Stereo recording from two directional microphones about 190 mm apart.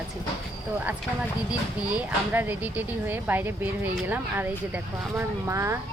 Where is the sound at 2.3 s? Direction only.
10° right (ahead or behind).